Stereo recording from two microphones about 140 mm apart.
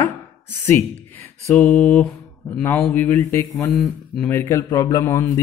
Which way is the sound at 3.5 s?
Centre (ahead or behind).